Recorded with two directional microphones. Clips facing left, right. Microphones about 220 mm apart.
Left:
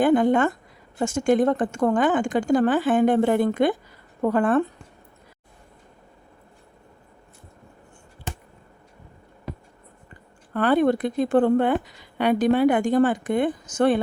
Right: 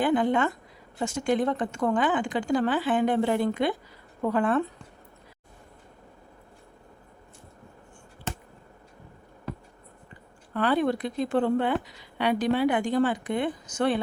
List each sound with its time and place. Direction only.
0.0 s a woman's voice: 45° left (ahead or behind)
10.5 s a woman's voice: 50° left (ahead or behind)